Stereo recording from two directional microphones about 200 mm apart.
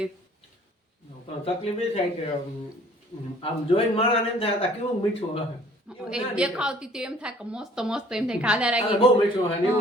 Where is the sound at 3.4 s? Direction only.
30° left (ahead or behind).